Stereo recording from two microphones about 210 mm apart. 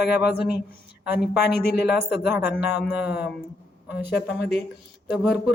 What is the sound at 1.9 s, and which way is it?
A man's voice, 5° right (ahead or behind).